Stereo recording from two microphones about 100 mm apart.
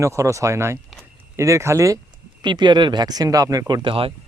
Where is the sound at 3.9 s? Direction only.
65° right (ahead or behind).